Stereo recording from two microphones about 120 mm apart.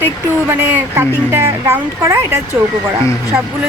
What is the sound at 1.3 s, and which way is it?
Speech, 25° right (ahead or behind).